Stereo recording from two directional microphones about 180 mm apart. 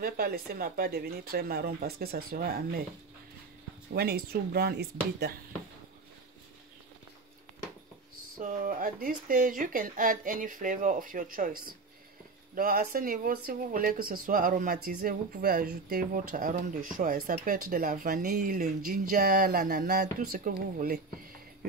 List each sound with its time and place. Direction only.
0.0 s speech: 55° right (ahead or behind)
3.9 s speech: 60° right (ahead or behind)
8.4 s speech: 45° right (ahead or behind)